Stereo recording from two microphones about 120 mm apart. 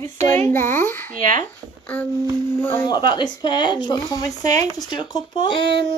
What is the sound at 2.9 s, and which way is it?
Speech, 40° left (ahead or behind).